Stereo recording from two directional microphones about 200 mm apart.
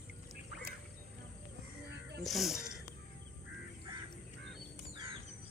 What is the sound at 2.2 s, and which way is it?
Speech, centre (ahead or behind).